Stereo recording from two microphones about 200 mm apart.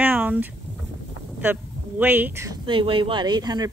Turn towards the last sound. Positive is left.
turn(degrees=-20)  # may be behind; listen again after turning